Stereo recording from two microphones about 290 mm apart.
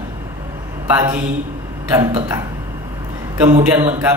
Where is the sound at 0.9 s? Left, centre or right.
Centre.